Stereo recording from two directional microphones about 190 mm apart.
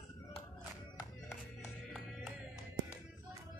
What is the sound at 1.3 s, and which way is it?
Music, 10° left (ahead or behind).